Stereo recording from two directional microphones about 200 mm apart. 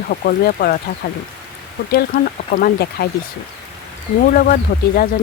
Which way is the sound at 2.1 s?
40° left (ahead or behind).